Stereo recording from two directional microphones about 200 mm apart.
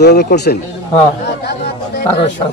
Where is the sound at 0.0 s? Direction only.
55° left (ahead or behind).